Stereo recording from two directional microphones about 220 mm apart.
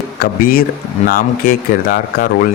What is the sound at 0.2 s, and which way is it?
Speech, 40° left (ahead or behind).